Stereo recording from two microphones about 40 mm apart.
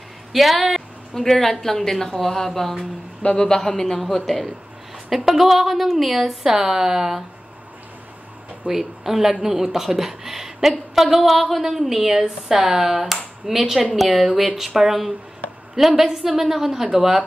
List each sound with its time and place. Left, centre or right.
0.3 s speech: centre
1.1 s a woman's voice: centre
3.3 s a woman's voice: centre
4.0 s a woman's voice: centre
8.6 s a woman's voice: centre